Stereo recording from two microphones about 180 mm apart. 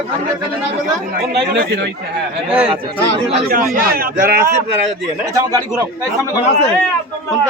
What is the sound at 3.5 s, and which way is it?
A man's voice, 55° right (ahead or behind).